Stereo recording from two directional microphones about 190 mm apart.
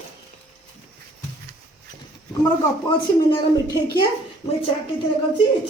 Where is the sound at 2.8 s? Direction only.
25° left (ahead or behind).